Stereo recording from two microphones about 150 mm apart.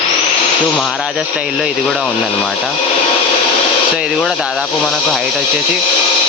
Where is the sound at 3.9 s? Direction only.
5° right (ahead or behind).